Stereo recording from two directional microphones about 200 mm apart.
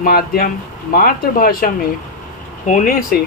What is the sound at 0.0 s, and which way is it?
Speech, 50° left (ahead or behind).